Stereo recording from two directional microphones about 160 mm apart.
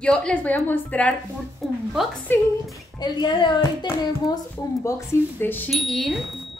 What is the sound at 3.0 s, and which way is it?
Speech, 25° left (ahead or behind).